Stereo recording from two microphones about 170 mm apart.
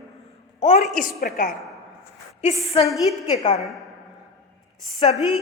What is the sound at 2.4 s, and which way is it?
Speech, 35° left (ahead or behind).